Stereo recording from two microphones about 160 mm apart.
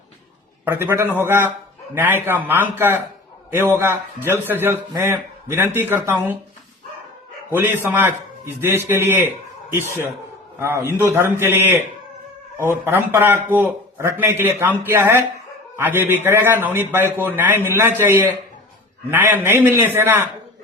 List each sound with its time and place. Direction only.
0.6 s a man's voice: 10° right (ahead or behind)
7.5 s a man's voice: 15° right (ahead or behind)
10.6 s a man's voice: 15° right (ahead or behind)